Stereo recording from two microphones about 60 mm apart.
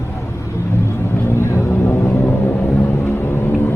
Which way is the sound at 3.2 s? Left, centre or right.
Left.